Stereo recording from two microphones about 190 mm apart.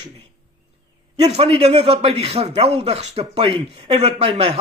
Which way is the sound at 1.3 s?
30° right (ahead or behind).